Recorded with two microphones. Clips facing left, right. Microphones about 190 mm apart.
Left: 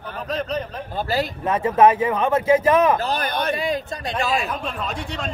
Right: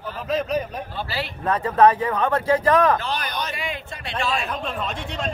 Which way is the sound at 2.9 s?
40° left (ahead or behind).